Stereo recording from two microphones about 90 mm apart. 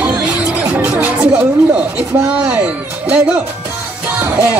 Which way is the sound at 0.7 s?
20° right (ahead or behind).